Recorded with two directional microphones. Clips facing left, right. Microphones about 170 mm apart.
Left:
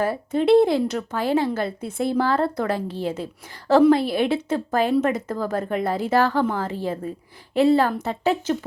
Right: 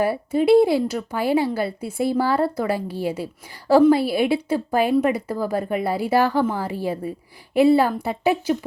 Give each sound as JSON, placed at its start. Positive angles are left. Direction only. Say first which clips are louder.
{"t": 0.0, "sound": "a woman's voice", "louder": "right 2 dB", "side_deg": -10}